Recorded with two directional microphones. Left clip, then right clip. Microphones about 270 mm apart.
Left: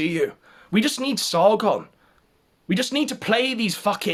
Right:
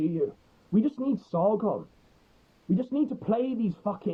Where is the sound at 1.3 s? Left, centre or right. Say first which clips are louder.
Left 9 dB; left.